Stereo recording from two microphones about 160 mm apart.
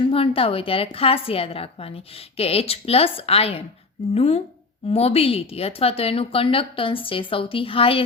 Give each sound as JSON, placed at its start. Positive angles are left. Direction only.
{"t": 0.1, "sound": "a woman's voice", "side_deg": 35}